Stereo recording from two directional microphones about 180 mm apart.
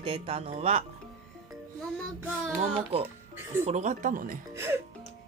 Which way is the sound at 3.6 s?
40° right (ahead or behind).